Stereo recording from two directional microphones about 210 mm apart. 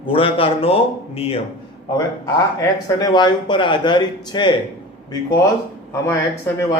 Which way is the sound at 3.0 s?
20° left (ahead or behind).